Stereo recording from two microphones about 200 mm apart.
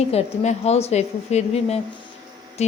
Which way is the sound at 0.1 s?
30° left (ahead or behind).